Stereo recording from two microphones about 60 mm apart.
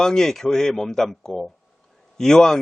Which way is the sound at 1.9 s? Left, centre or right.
Centre.